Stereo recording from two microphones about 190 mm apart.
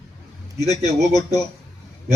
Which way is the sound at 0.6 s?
20° left (ahead or behind).